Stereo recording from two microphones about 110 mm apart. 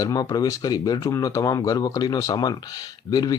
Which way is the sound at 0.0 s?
35° left (ahead or behind).